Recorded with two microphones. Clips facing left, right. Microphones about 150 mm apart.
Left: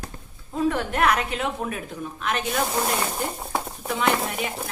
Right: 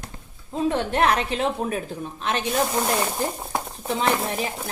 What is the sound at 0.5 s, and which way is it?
A woman's voice, 25° right (ahead or behind).